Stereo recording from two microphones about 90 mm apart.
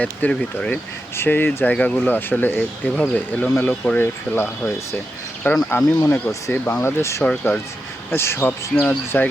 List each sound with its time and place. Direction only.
0.0 s speech: 15° left (ahead or behind)
1.1 s speech: 25° left (ahead or behind)